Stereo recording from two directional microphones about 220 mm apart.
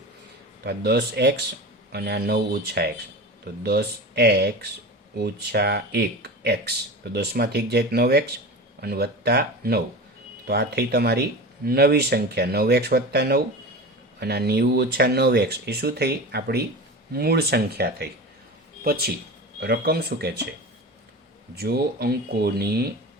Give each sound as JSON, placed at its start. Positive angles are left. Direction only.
{"t": 0.6, "sound": "speech", "side_deg": -45}
{"t": 21.5, "sound": "speech", "side_deg": -45}